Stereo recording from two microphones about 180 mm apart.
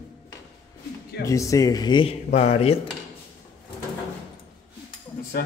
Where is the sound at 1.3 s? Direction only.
20° left (ahead or behind).